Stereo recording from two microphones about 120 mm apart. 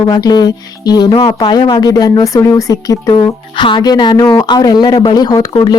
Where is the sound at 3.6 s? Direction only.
40° left (ahead or behind).